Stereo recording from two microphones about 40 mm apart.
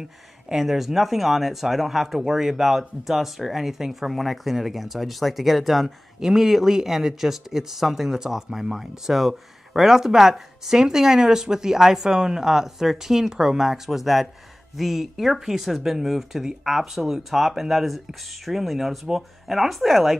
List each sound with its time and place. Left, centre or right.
0.5 s speech: centre